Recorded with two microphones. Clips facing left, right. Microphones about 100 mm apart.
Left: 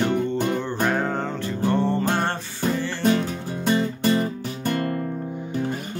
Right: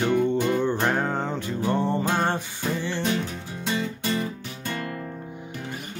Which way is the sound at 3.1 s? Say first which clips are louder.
Left 5 dB; 50° left (ahead or behind).